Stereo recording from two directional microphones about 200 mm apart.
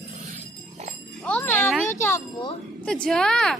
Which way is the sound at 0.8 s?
35° right (ahead or behind).